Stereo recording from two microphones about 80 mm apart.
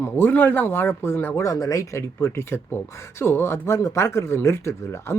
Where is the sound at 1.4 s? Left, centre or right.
Left.